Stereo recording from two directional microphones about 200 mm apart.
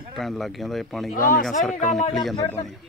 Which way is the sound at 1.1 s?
45° left (ahead or behind).